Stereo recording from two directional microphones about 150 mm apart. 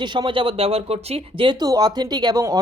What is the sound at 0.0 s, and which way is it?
A woman's voice, 30° right (ahead or behind).